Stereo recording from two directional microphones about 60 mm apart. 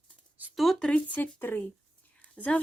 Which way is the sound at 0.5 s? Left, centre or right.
Centre.